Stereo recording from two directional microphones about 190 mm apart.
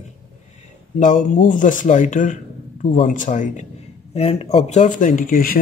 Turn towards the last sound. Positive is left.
turn(degrees=50)  # may be behind; listen again after turning